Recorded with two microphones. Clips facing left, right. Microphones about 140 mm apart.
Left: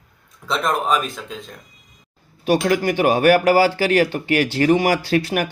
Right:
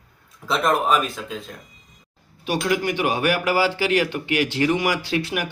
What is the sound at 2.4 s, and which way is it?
Speech, 45° left (ahead or behind).